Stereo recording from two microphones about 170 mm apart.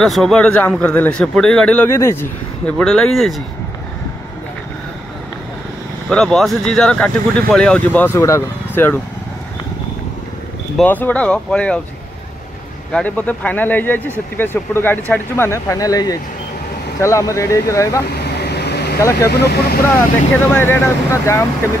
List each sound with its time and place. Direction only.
0.0 s a man's voice: centre (ahead or behind)
6.0 s a man's voice: centre (ahead or behind)
10.8 s speech: 10° left (ahead or behind)
12.9 s speech: 10° left (ahead or behind)
18.2 s vehicle: 70° left (ahead or behind)
18.9 s speech: 15° left (ahead or behind)
19.3 s speech: 70° left (ahead or behind)
20.3 s speech: 10° left (ahead or behind)